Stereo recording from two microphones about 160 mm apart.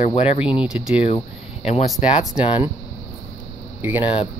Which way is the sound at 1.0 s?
40° left (ahead or behind).